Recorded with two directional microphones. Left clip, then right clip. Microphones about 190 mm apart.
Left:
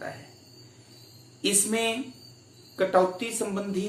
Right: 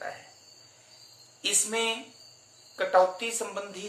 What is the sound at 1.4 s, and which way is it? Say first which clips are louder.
Speech: left 2 dB; 20° right (ahead or behind).